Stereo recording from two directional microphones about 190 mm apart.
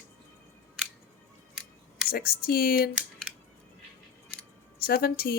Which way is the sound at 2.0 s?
55° left (ahead or behind).